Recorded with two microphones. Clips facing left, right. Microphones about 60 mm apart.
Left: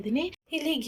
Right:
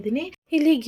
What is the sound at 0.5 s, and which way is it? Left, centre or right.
Speech, right.